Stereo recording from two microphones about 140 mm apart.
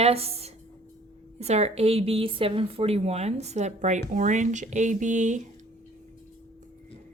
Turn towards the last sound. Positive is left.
turn(degrees=-60)  # may be behind; listen again after turning